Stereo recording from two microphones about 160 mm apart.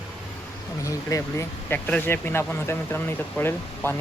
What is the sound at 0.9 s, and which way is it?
Speech, 20° left (ahead or behind).